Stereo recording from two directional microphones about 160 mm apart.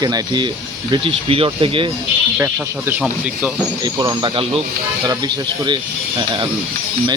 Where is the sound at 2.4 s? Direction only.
15° right (ahead or behind).